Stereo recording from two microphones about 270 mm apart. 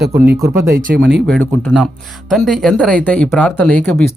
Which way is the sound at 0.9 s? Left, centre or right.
Right.